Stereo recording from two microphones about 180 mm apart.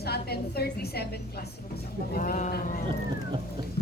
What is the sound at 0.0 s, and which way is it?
A woman's voice, 60° left (ahead or behind).